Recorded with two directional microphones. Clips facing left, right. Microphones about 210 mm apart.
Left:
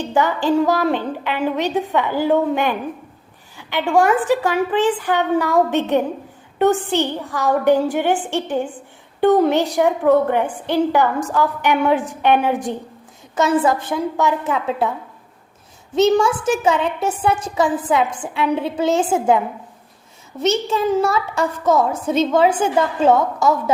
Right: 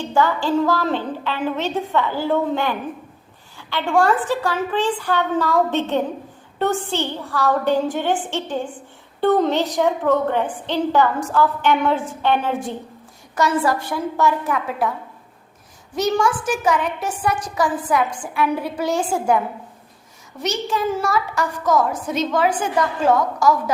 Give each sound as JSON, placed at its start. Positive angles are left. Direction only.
{"t": 0.0, "sound": "a woman's voice", "side_deg": 20}
{"t": 16.0, "sound": "a woman's voice", "side_deg": 25}
{"t": 20.4, "sound": "a woman's voice", "side_deg": 25}